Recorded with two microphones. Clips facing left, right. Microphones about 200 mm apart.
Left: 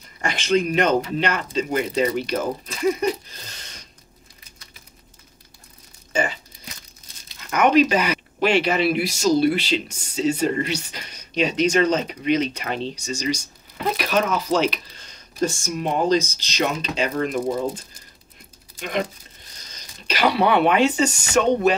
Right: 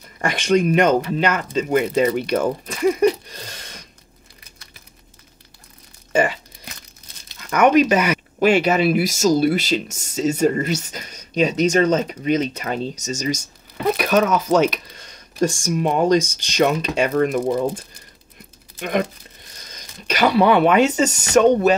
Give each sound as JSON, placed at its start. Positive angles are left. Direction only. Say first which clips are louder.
{"t": 0.2, "sound": "speech", "louder": "right 3 dB", "side_deg": -50}
{"t": 7.4, "sound": "speech", "louder": "right 2 dB", "side_deg": -50}
{"t": 18.8, "sound": "speech", "louder": "right 4 dB", "side_deg": -55}
{"t": 20.2, "sound": "speech", "louder": "right 3 dB", "side_deg": -45}